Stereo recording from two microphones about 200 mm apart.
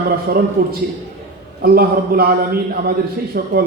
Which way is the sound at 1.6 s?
50° right (ahead or behind).